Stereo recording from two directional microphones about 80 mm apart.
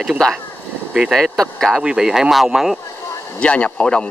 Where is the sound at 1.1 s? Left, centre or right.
Centre.